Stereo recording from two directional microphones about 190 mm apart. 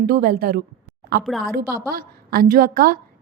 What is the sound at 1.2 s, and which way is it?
Speech, centre (ahead or behind).